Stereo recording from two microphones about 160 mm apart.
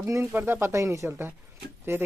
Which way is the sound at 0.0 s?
15° right (ahead or behind).